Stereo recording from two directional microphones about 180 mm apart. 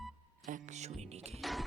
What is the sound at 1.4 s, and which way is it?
Music, centre (ahead or behind).